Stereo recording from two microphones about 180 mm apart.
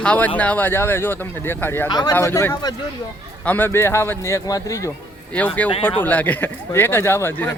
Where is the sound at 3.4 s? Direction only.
10° left (ahead or behind).